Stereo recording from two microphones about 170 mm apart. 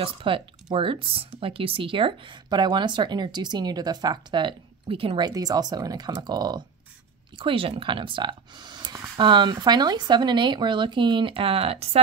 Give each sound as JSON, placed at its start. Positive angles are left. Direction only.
{"t": 0.0, "sound": "speech", "side_deg": -30}